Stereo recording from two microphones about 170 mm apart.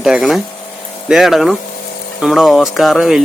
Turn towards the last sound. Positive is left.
turn(degrees=0)  # may be behind; listen again after turning